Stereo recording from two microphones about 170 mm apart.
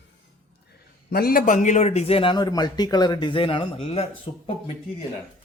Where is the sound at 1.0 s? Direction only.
60° left (ahead or behind); by 4.4 s 35° left (ahead or behind).